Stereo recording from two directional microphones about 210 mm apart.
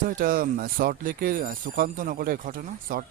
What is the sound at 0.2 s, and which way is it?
Speech, 45° right (ahead or behind).